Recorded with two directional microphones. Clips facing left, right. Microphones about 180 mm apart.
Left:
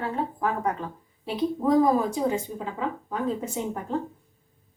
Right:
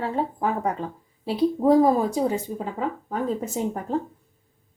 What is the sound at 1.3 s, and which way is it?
Speech, 30° right (ahead or behind).